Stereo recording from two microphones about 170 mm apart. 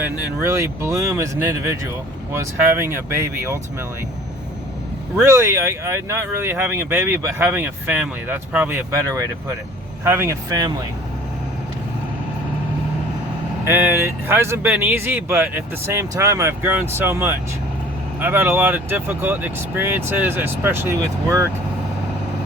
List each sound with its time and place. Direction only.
0.0 s speech: 15° right (ahead or behind)
5.2 s speech: 15° right (ahead or behind)
13.7 s speech: 10° right (ahead or behind)